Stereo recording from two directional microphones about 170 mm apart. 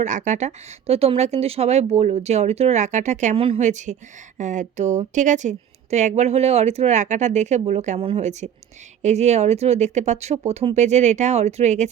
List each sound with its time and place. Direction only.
0.0 s a woman's voice: 45° right (ahead or behind)